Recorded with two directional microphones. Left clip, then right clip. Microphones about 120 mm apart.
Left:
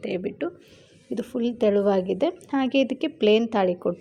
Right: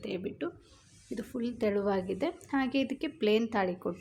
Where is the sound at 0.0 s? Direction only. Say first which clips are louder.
Left 8 dB; 25° left (ahead or behind).